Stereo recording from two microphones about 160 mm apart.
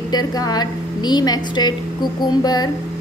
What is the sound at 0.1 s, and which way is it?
A woman's voice, 25° left (ahead or behind).